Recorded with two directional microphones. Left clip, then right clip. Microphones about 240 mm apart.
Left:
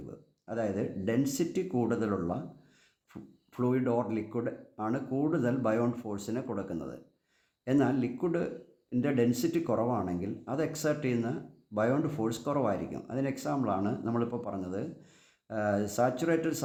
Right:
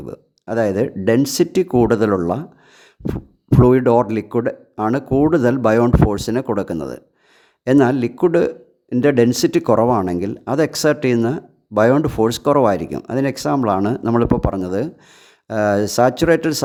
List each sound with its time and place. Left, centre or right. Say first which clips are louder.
0.0 s speech: right 15 dB; right
3.5 s speech: right 17 dB; right